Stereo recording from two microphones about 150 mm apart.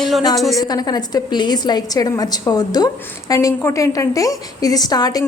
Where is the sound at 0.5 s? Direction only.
25° left (ahead or behind).